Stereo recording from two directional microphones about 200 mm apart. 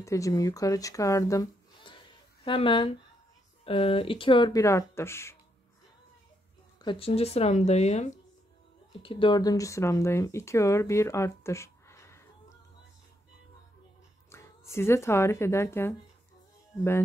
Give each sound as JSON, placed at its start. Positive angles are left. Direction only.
{"t": 0.0, "sound": "speech", "side_deg": 15}
{"t": 6.8, "sound": "speech", "side_deg": 25}
{"t": 14.3, "sound": "speech", "side_deg": 15}